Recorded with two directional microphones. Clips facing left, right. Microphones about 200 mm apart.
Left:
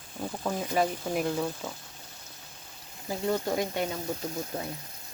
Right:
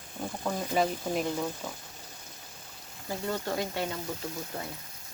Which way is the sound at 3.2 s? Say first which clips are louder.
Left 4 dB; 20° left (ahead or behind).